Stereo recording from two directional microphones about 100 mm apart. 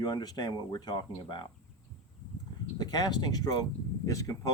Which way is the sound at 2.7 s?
45° left (ahead or behind).